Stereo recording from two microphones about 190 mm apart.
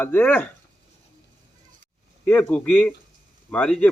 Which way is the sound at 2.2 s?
10° left (ahead or behind).